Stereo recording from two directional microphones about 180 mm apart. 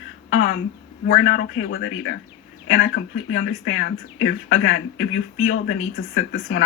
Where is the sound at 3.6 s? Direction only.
80° left.